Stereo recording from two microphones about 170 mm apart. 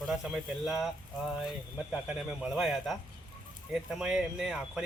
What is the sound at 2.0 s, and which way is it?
Speech, 5° right (ahead or behind).